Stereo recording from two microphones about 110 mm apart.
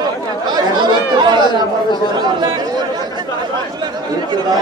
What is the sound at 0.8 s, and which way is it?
Chatter, 45° right (ahead or behind).